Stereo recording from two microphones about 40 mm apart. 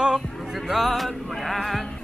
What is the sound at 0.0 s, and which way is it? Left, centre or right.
Music, centre.